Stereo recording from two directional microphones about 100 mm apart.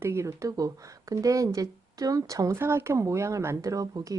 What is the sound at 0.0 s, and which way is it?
Speech, 30° right (ahead or behind).